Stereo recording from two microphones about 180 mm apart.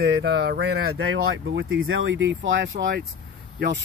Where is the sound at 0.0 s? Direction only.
70° right (ahead or behind); by 2.7 s 90° right.